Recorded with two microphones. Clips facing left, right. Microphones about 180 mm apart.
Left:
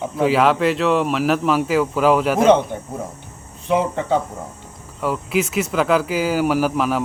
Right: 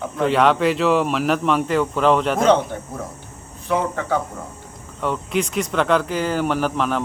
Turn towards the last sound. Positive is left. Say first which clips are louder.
# left 2 dB
turn(degrees=5)  # may be behind; listen again after turning